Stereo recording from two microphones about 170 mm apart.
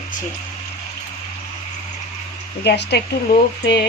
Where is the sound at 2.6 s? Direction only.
80° left.